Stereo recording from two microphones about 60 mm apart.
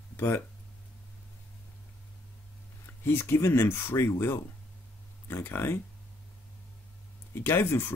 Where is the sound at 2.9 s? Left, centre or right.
Left.